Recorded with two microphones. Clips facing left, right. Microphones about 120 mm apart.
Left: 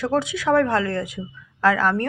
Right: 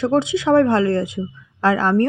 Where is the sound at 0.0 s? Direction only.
25° right (ahead or behind).